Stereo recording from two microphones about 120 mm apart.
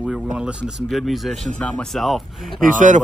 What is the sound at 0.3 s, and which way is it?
Speech, 10° right (ahead or behind).